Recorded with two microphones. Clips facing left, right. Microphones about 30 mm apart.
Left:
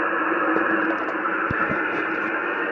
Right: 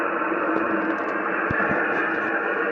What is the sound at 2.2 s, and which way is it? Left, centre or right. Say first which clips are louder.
Radio: right 1 dB; centre.